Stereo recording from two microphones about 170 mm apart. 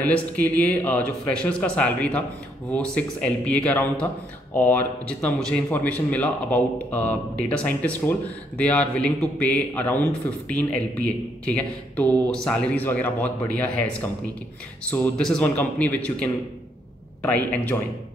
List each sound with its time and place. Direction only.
0.0 s speech: 10° left (ahead or behind)